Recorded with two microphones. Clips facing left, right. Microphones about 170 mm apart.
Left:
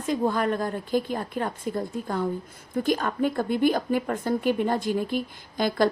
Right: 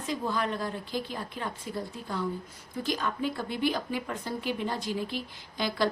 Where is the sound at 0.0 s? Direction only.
50° left (ahead or behind).